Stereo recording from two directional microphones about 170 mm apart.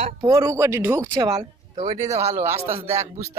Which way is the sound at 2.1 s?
40° right (ahead or behind).